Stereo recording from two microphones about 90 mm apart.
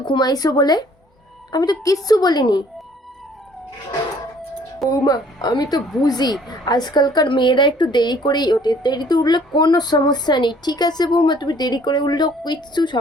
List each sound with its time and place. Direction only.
0.0 s speech: 55° left (ahead or behind)
4.9 s speech: 45° left (ahead or behind)